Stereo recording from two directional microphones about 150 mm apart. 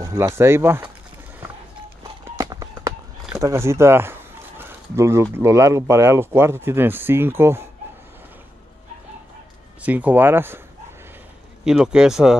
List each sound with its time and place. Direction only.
0.0 s a sound: 20° right (ahead or behind)
0.4 s speech: 15° right (ahead or behind)
2.3 s run: 25° right (ahead or behind)
3.3 s speech: 20° right (ahead or behind)
9.8 s speech: 10° right (ahead or behind)
11.6 s speech: 5° right (ahead or behind)